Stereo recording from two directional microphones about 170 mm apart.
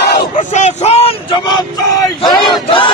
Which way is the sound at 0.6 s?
40° left (ahead or behind).